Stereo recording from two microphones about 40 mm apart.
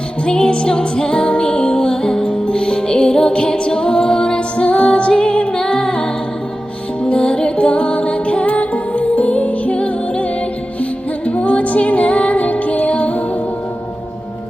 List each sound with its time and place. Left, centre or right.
0.3 s music: left
11.3 s music: left